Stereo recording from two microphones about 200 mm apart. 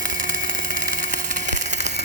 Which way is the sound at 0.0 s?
40° right (ahead or behind).